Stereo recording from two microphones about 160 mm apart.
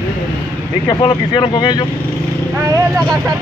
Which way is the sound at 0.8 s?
30° left (ahead or behind).